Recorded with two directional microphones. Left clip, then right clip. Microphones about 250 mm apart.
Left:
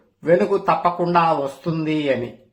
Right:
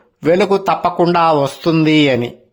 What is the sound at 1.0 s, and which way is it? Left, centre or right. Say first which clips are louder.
Speech: right 5 dB; right.